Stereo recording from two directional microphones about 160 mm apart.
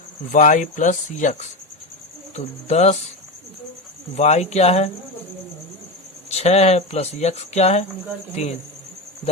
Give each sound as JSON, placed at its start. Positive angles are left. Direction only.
{"t": 0.3, "sound": "speech", "side_deg": 50}
{"t": 4.1, "sound": "speech", "side_deg": 45}
{"t": 6.3, "sound": "speech", "side_deg": 40}